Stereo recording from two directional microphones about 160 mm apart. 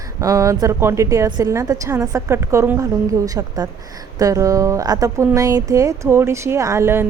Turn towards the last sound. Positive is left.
turn(degrees=-15)  # may be behind; listen again after turning